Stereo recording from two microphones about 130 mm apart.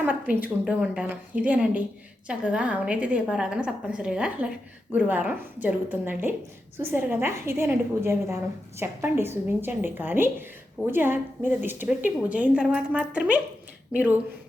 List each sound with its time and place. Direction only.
0.0 s a woman's voice: 15° right (ahead or behind)